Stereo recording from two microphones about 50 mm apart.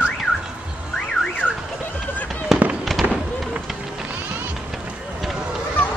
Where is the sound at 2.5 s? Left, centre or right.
Centre.